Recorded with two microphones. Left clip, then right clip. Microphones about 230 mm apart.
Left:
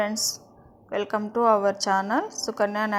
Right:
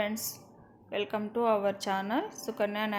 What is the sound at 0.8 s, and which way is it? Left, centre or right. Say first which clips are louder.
A woman's voice: left 6 dB; centre.